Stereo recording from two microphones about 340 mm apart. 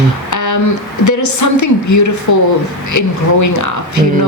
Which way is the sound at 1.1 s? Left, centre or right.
Left.